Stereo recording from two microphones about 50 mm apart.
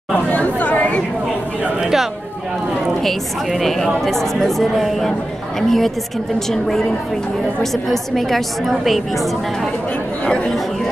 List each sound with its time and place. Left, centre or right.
0.3 s chatter: left
3.0 s a woman's voice: centre
7.7 s a woman's voice: centre
10.2 s speech: left